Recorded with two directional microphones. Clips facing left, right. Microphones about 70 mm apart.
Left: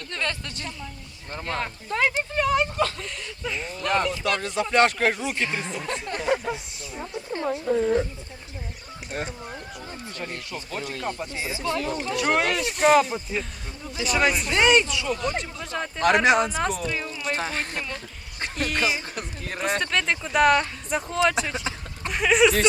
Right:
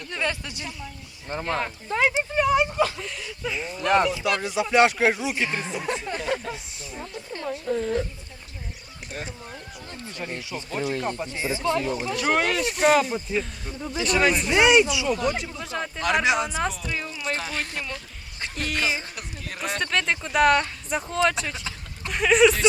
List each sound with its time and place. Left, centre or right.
0.1 s speech: centre
6.2 s speech: centre
7.0 s speech: centre
9.1 s speech: left
10.1 s speech: centre
17.3 s speech: left
18.5 s speech: centre
19.1 s a sound: left
19.8 s speech: centre